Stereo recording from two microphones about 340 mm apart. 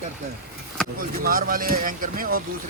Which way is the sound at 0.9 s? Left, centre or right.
Right.